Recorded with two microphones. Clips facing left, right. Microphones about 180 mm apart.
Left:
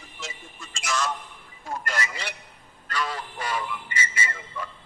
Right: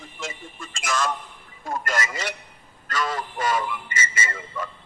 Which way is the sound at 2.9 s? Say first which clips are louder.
Right 3 dB; 45° right (ahead or behind).